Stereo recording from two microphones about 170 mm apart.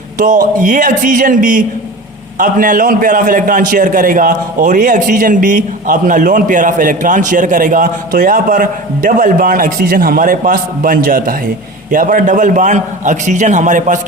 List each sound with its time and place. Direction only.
0.6 s a man's voice: 50° right (ahead or behind)